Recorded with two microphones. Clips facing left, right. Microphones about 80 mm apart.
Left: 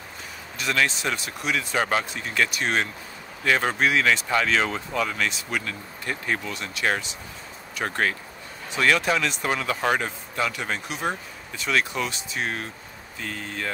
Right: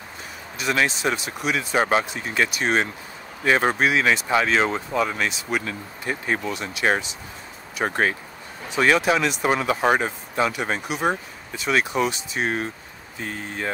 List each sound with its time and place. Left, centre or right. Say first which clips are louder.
0.6 s speech: right 2 dB; centre